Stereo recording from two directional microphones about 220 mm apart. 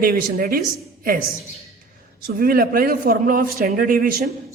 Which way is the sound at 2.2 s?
40° right (ahead or behind).